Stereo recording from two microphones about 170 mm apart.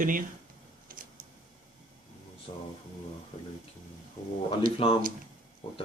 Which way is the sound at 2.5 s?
30° left (ahead or behind).